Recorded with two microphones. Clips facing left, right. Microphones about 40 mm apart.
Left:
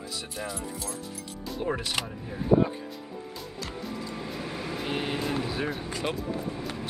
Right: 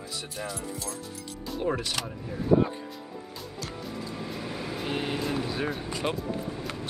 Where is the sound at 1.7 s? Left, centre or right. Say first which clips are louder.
Even; centre.